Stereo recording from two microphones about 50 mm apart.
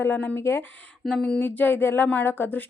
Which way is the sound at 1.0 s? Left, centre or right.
Centre.